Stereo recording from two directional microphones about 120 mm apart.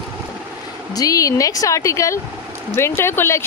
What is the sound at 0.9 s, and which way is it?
Speech, 30° left (ahead or behind).